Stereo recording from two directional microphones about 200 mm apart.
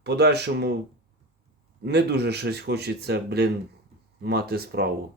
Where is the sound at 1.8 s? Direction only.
55° right (ahead or behind).